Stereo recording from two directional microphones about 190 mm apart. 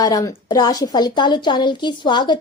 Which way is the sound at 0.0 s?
20° left (ahead or behind).